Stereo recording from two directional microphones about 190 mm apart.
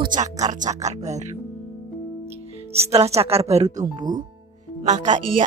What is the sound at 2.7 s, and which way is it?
Speech, 35° right (ahead or behind).